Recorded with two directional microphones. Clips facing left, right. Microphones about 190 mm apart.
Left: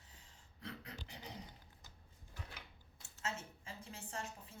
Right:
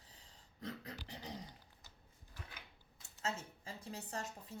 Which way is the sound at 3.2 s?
40° right (ahead or behind).